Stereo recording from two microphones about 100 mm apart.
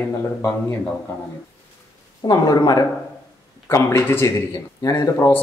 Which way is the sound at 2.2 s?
40° left (ahead or behind).